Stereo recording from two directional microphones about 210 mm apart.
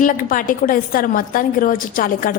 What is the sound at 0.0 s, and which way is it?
A woman's voice, 40° left (ahead or behind).